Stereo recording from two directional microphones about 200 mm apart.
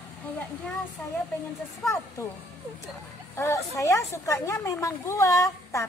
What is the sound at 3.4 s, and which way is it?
A woman's voice, 15° left (ahead or behind).